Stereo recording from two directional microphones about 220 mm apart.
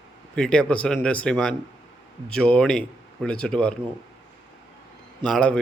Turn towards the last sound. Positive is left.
turn(degrees=5)  # may be behind; listen again after turning